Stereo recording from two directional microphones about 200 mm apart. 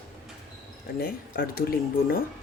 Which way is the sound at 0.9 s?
50° left (ahead or behind).